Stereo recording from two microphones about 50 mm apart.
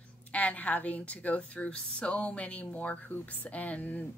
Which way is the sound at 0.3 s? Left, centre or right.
Left.